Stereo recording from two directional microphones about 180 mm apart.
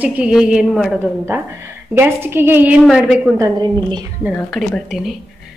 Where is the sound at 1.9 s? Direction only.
15° right (ahead or behind).